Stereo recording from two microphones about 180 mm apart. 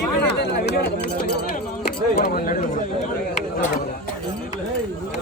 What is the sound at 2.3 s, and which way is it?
Speech, 50° left (ahead or behind).